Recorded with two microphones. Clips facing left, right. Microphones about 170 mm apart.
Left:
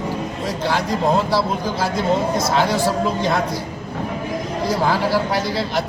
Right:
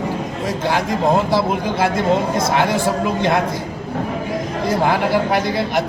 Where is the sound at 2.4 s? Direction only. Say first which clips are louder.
Right 1 dB; 55° right (ahead or behind).